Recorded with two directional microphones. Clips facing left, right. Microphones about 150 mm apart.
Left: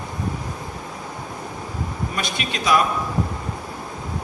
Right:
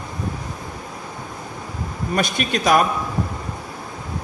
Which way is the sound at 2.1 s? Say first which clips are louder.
Right 10 dB; 50° right (ahead or behind).